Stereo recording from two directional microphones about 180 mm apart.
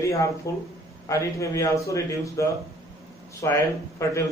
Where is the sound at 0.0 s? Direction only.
15° left (ahead or behind).